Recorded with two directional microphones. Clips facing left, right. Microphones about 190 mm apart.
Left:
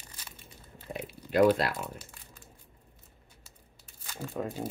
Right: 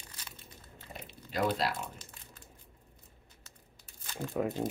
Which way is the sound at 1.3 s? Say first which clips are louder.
Left 8 dB; 60° left (ahead or behind).